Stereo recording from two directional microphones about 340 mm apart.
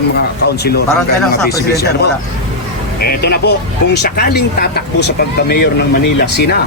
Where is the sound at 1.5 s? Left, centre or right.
Left.